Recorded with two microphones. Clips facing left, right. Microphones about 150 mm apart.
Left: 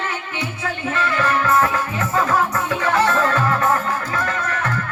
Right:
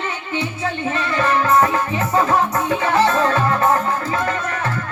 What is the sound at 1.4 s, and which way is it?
Music, 25° right (ahead or behind).